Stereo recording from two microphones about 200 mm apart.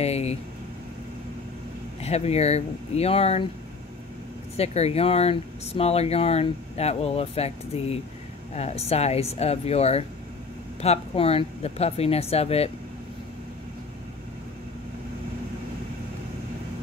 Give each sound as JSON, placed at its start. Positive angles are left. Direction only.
{"t": 0.0, "sound": "vehicle", "side_deg": 30}
{"t": 2.0, "sound": "speech", "side_deg": 30}
{"t": 4.6, "sound": "speech", "side_deg": 30}